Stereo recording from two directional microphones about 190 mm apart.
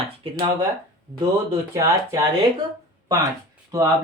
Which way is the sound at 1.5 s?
15° right (ahead or behind).